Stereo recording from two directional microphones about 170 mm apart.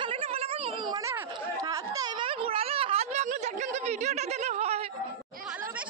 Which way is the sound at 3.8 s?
40° right (ahead or behind).